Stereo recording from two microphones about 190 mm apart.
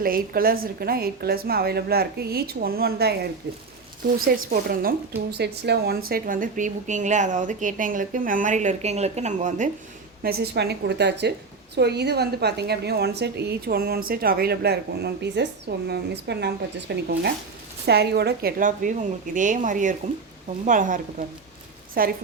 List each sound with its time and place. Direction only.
0.0 s a woman's voice: 50° right (ahead or behind)
4.3 s a woman's voice: 55° right (ahead or behind)
10.2 s a woman's voice: 55° right (ahead or behind)